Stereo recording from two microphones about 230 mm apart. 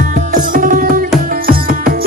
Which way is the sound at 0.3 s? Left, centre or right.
Right.